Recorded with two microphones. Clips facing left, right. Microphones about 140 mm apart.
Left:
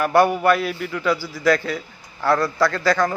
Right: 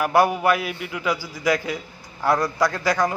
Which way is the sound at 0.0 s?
10° right (ahead or behind).